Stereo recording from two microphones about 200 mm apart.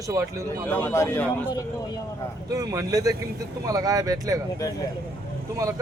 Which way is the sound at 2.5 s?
15° right (ahead or behind).